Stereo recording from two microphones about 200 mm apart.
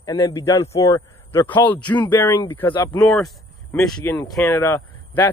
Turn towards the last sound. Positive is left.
turn(degrees=15)  # may be behind; listen again after turning